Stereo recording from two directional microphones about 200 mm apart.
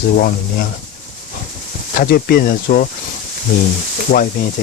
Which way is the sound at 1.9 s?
50° left (ahead or behind).